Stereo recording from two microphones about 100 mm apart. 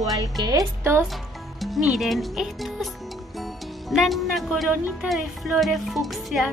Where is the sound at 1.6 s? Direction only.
5° right (ahead or behind).